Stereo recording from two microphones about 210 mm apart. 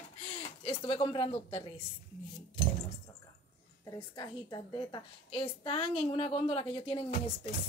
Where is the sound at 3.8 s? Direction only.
20° left (ahead or behind).